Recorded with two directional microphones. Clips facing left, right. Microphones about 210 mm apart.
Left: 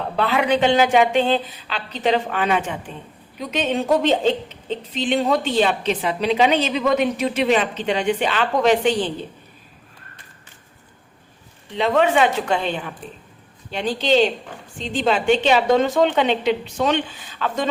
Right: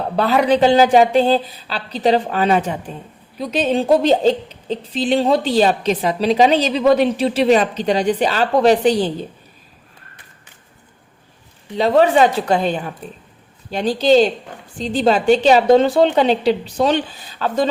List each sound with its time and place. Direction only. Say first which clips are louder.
0.2 s a woman's voice: right 4 dB; 40° right (ahead or behind)
11.8 s a woman's voice: right 4 dB; 35° right (ahead or behind)